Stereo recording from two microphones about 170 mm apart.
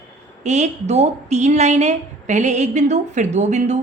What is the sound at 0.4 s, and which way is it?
A woman's voice, 40° right (ahead or behind).